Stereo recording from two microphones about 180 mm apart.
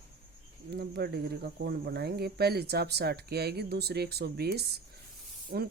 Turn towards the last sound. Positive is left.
turn(degrees=-60)  # may be behind; listen again after turning